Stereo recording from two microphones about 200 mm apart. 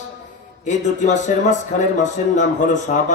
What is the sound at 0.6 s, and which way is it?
Speech, 35° left (ahead or behind).